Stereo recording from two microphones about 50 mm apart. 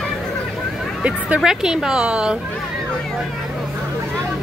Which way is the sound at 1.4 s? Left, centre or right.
Centre.